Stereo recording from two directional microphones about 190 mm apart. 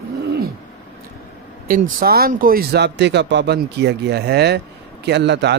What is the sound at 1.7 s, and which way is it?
Speech, 50° right (ahead or behind).